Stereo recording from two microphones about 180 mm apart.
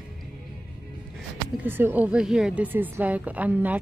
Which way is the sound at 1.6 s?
10° right (ahead or behind).